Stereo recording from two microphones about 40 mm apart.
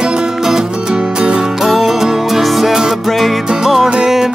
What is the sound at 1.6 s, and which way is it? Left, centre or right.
Music, centre.